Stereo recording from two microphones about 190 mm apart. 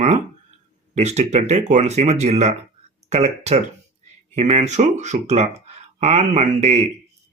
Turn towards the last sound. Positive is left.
turn(degrees=-35)  # may be behind; listen again after turning